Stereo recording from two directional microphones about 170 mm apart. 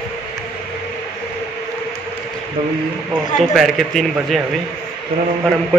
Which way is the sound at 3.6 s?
Centre (ahead or behind).